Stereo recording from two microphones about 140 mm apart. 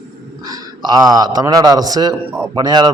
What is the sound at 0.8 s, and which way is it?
A man's voice, 30° right (ahead or behind).